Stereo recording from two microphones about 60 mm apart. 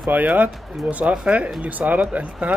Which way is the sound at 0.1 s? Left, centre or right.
Right.